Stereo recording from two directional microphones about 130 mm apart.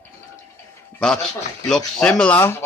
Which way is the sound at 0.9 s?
5° left (ahead or behind).